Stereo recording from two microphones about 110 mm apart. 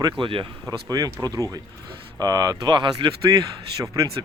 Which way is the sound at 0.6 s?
30° right (ahead or behind).